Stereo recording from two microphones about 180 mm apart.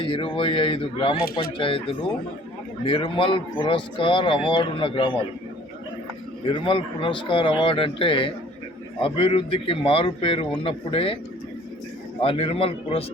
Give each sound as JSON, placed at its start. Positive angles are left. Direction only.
{"t": 0.0, "sound": "speech", "side_deg": 30}
{"t": 6.4, "sound": "speech", "side_deg": 30}
{"t": 12.2, "sound": "speech", "side_deg": 30}